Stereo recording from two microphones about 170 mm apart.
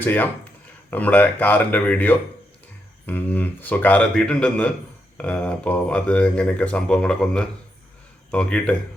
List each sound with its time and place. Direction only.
0.0 s speech: 10° left (ahead or behind)